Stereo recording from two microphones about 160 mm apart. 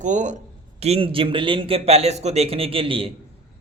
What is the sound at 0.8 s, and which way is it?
Speech, 40° right (ahead or behind).